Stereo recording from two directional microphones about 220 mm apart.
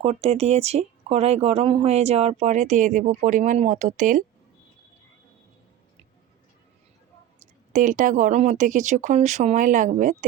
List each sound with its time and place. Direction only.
0.0 s speech: 25° right (ahead or behind)
7.7 s speech: 35° right (ahead or behind)